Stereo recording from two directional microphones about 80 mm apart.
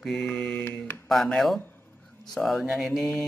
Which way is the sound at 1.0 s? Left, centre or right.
Centre.